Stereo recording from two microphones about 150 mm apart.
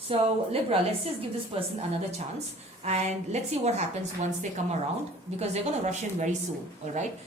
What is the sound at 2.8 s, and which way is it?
A woman's voice, 45° right (ahead or behind).